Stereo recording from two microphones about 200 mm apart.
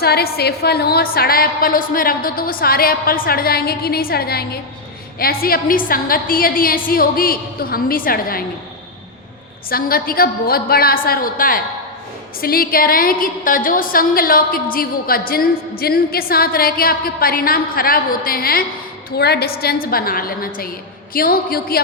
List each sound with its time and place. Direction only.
0.0 s a woman's voice: 50° left (ahead or behind)
9.6 s a woman's voice: 45° left (ahead or behind)